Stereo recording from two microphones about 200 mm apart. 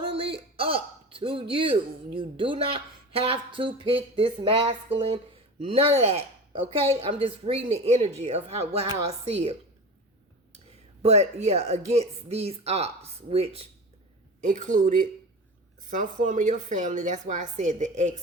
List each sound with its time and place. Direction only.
0.1 s a woman's voice: 25° right (ahead or behind)
11.0 s a woman's voice: 35° right (ahead or behind)